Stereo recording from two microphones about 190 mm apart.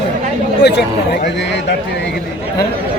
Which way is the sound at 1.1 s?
65° left (ahead or behind).